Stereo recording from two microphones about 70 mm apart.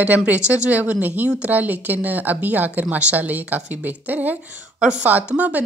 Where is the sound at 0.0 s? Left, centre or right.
Right.